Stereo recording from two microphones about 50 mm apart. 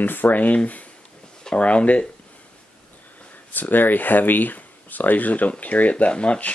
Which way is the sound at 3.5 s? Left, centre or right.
Left.